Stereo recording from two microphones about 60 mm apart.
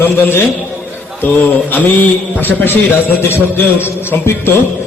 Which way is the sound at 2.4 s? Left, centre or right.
Left.